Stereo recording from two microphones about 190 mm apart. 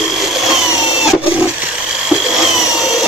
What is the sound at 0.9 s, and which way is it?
Wood, 5° right (ahead or behind).